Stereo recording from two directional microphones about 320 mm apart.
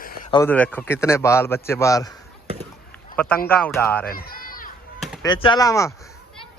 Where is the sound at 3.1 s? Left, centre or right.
Centre.